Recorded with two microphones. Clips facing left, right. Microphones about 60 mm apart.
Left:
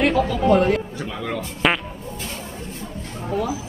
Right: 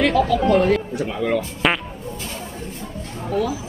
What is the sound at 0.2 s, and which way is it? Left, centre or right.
Speech, centre.